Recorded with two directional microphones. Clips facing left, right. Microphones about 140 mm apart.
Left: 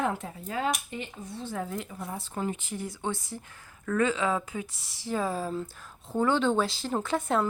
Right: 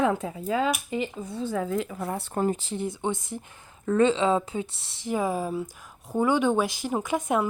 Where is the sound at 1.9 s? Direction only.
70° right (ahead or behind).